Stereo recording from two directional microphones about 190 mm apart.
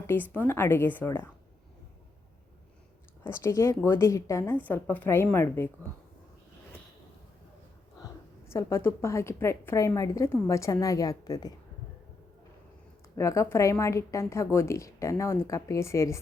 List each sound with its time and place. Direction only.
0.1 s a woman's voice: 10° left (ahead or behind)
3.2 s a woman's voice: 15° left (ahead or behind)
7.9 s a woman's voice: 20° left (ahead or behind)
13.1 s a woman's voice: 15° left (ahead or behind)